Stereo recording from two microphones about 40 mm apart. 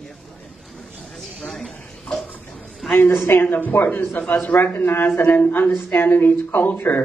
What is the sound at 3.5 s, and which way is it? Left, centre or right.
Speech, left.